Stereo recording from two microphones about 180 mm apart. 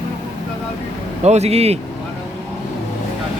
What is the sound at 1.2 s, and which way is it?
Speech, 35° right (ahead or behind).